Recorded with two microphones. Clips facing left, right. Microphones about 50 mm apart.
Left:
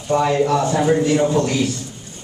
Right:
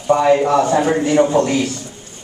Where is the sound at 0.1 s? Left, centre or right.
Centre.